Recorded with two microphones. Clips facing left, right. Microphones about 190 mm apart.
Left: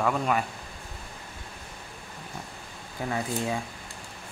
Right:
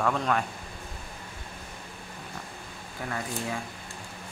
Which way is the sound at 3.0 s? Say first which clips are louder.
Left 4 dB; 20° left (ahead or behind).